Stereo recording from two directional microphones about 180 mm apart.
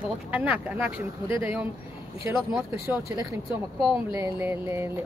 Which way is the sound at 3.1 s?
15° right (ahead or behind).